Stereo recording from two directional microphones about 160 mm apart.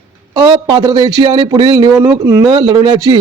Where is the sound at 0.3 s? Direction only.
25° right (ahead or behind).